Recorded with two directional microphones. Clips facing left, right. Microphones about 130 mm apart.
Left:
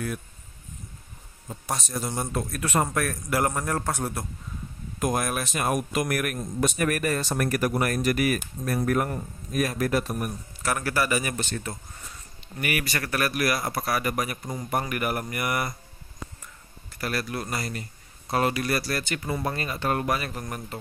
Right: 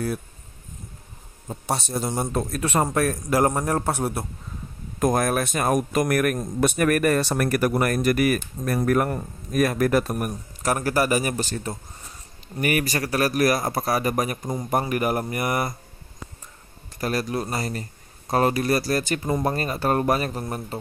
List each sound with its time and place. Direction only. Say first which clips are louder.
1.5 s a man's voice: right 5 dB; 30° right (ahead or behind)
5.0 s speech: right 5 dB; 45° right (ahead or behind)
6.3 s speech: right 4 dB; 65° right (ahead or behind); by 13.7 s 40° right (ahead or behind)
13.7 s a man's voice: right 4 dB; 30° right (ahead or behind)
17.0 s speech: right 5 dB; 35° right (ahead or behind)